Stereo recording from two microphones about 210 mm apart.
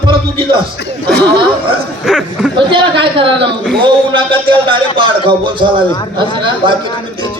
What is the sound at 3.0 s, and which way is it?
A woman's voice, 25° right (ahead or behind).